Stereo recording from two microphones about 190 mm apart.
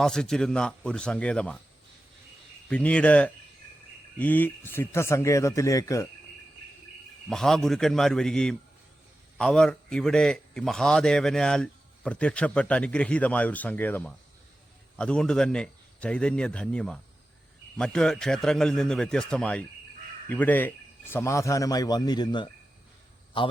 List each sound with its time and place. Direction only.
0.0 s speech: 5° left (ahead or behind)
2.6 s speech: 5° left (ahead or behind)
7.3 s a man's voice: centre (ahead or behind); by 23.5 s 25° left (ahead or behind)